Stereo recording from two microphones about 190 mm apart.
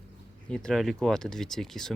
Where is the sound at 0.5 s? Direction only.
Centre (ahead or behind).